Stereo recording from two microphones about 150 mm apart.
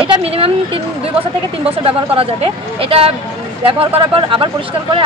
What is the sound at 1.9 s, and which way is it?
Speech, 40° right (ahead or behind).